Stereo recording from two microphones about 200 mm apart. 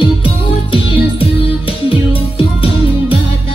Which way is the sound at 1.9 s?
25° left (ahead or behind).